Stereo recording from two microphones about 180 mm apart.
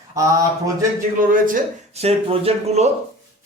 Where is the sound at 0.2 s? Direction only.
20° right (ahead or behind).